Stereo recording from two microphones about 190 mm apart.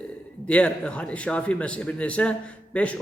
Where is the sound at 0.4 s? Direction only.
5° left (ahead or behind).